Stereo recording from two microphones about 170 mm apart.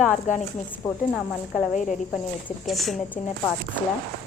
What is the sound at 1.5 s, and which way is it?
Speech, 45° left (ahead or behind).